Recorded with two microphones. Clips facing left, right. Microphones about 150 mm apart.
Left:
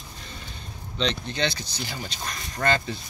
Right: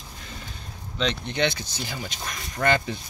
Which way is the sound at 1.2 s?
20° right (ahead or behind).